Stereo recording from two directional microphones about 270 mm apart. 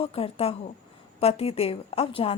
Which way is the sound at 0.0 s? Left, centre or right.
Left.